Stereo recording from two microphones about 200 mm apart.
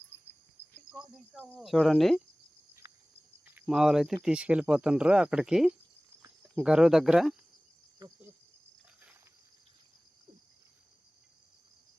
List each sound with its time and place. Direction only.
0.9 s speech: 5° right (ahead or behind)
3.4 s speech: 5° right (ahead or behind)
7.9 s cricket: 15° right (ahead or behind)